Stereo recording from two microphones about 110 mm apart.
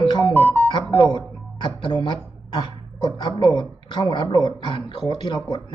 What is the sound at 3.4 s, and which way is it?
Speech, 45° left (ahead or behind).